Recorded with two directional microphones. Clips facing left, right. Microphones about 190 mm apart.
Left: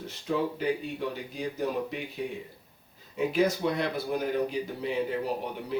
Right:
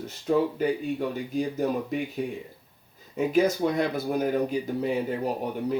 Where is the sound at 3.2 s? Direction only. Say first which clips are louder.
Right 3 dB; 45° right (ahead or behind).